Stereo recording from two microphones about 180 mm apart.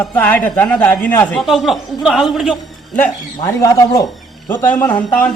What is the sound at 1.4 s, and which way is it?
Speech, centre (ahead or behind).